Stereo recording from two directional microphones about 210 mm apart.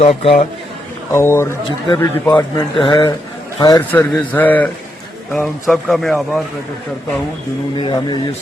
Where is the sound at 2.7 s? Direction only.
25° left (ahead or behind); by 6.4 s centre (ahead or behind).